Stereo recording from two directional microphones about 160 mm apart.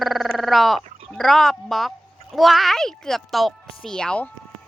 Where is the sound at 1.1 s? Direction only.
Centre (ahead or behind).